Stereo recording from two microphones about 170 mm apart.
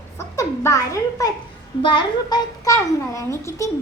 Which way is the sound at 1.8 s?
25° left (ahead or behind).